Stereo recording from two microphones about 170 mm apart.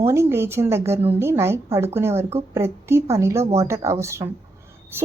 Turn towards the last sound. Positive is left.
turn(degrees=-15)  # may be behind; listen again after turning